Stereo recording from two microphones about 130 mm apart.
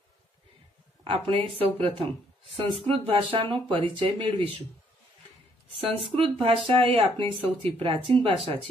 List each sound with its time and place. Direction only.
1.0 s speech: 45° right (ahead or behind)
5.8 s speech: 45° right (ahead or behind)